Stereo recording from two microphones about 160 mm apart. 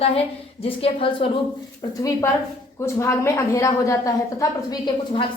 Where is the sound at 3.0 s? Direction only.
15° left (ahead or behind).